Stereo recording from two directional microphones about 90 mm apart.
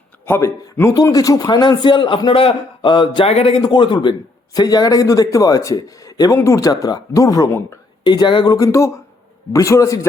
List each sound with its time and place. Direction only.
0.3 s speech: 25° left (ahead or behind)
1.1 s a man's voice: 40° left (ahead or behind); by 4.1 s 60° left (ahead or behind)
4.5 s a man's voice: 45° left (ahead or behind)
8.0 s a man's voice: 55° left (ahead or behind)
8.5 s a man's voice: 35° left (ahead or behind)